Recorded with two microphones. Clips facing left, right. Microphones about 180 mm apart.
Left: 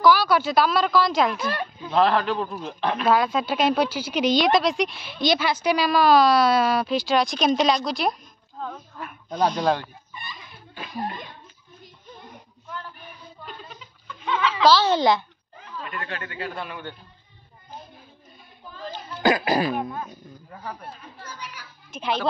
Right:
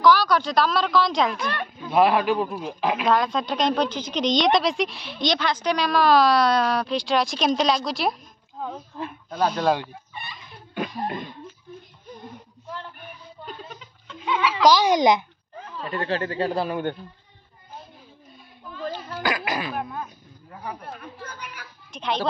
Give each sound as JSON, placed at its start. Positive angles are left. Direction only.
{"t": 0.0, "sound": "a man's voice", "side_deg": 5}
{"t": 1.9, "sound": "a man's voice", "side_deg": -10}
{"t": 8.7, "sound": "speech", "side_deg": -25}
{"t": 9.3, "sound": "a man's voice", "side_deg": -5}
{"t": 10.1, "sound": "chicken", "side_deg": -60}
{"t": 14.2, "sound": "babbling", "side_deg": -10}
{"t": 15.6, "sound": "speech", "side_deg": -35}
{"t": 19.2, "sound": "throat clearing", "side_deg": 30}
{"t": 19.7, "sound": "a man's voice", "side_deg": 0}
{"t": 20.9, "sound": "chatter", "side_deg": -55}
{"t": 21.9, "sound": "speech", "side_deg": 5}